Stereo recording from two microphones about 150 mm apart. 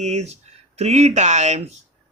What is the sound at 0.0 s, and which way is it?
A man's voice, 50° right (ahead or behind).